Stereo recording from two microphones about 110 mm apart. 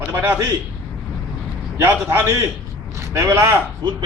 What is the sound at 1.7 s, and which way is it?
A man's voice, 25° right (ahead or behind).